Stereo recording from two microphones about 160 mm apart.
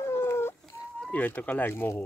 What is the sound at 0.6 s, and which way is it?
Bird, 5° left (ahead or behind).